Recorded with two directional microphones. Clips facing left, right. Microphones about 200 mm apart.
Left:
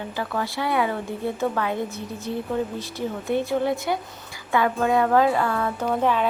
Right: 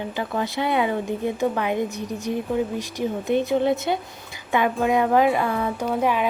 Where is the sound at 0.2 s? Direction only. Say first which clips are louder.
Right 2 dB; 20° right (ahead or behind).